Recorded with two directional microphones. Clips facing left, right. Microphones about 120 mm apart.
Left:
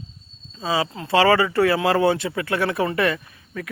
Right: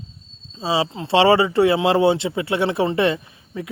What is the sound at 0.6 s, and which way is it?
Speech, 25° right (ahead or behind).